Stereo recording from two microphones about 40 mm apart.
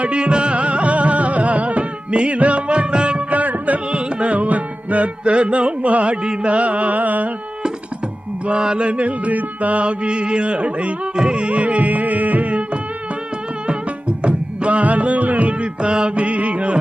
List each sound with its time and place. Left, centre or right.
0.0 s music: right
3.3 s music: right
8.5 s mantra: right
11.1 s music: right
13.7 s music: right